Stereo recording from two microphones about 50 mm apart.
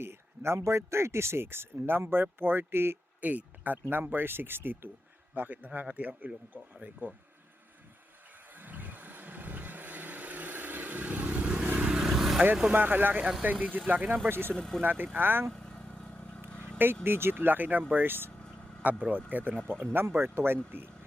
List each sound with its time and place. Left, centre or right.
0.0 s speech: right
3.2 s speech: right
5.3 s speech: right
8.5 s vehicle: right
12.0 s vehicle: centre
12.7 s speech: right
14.3 s speech: right
14.5 s speech: centre
14.8 s speech: right
15.5 s vehicle: centre
16.7 s speech: right
18.8 s speech: right
19.5 s speech: centre
19.8 s speech: right